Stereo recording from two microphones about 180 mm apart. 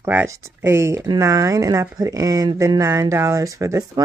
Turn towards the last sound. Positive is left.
turn(degrees=-20)  # may be behind; listen again after turning